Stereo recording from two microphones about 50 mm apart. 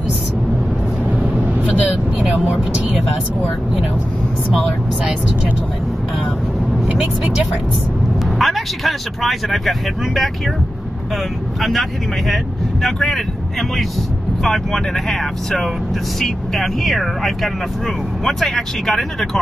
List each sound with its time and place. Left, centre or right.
1.1 s vehicle: right
2.4 s speech: right
8.4 s speech: centre
11.6 s speech: centre